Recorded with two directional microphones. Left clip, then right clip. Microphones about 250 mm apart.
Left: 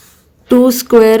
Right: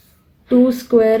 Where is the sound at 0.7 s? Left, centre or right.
Left.